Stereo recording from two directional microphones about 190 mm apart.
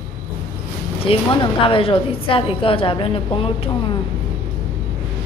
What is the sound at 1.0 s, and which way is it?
A woman's voice, 30° left (ahead or behind).